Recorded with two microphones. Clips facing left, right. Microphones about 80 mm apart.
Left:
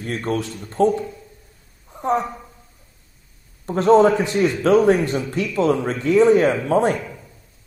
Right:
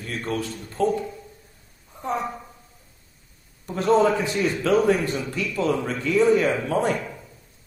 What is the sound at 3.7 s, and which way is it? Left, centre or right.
A man's voice, left.